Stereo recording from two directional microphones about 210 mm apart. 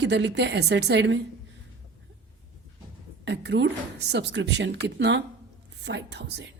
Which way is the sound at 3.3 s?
55° right (ahead or behind).